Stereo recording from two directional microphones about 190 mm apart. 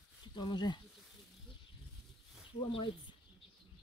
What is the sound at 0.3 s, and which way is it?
Speech, 25° left (ahead or behind).